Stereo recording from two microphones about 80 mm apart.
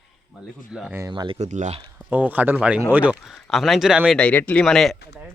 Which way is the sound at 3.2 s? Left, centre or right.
Centre.